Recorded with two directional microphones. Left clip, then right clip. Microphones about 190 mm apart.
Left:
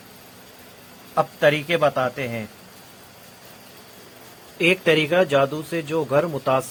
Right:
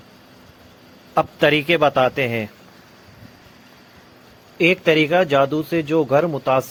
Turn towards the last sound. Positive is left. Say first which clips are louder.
# right 3 dB
turn(degrees=-30)  # may be behind; listen again after turning